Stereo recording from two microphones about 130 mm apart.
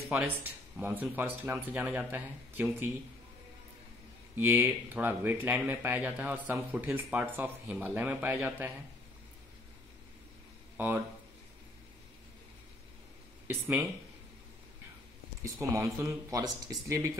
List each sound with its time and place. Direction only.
0.1 s speech: 10° right (ahead or behind)
4.4 s speech: 15° right (ahead or behind)
15.4 s speech: 25° right (ahead or behind)